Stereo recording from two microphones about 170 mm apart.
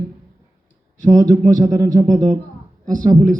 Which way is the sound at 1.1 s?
20° right (ahead or behind).